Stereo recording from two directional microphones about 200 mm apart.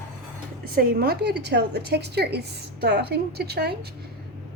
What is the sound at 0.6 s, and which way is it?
A woman's voice, 45° right (ahead or behind).